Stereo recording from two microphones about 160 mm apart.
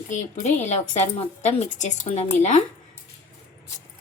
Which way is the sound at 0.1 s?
50° left (ahead or behind).